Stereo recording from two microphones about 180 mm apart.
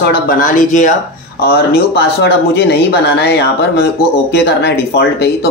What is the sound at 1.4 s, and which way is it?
Speech, 60° left (ahead or behind).